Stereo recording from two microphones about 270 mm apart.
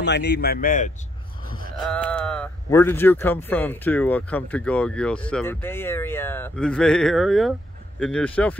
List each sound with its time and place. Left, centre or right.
0.0 s speech: left
1.9 s speech: centre